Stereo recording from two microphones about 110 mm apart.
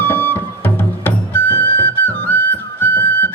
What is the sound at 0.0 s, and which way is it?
Music, 15° left (ahead or behind).